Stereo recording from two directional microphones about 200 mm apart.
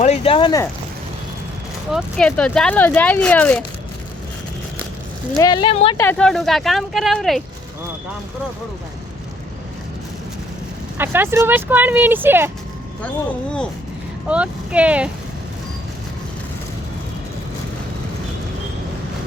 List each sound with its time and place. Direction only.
0.0 s speech: 30° left (ahead or behind)
1.9 s speech: centre (ahead or behind)
5.4 s speech: 20° left (ahead or behind)
6.0 s speech: 5° left (ahead or behind)
10.9 s speech: 10° right (ahead or behind)
14.3 s speech: 5° right (ahead or behind)